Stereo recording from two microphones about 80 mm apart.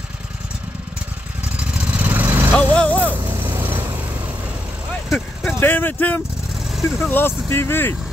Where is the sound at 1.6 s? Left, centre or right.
Centre.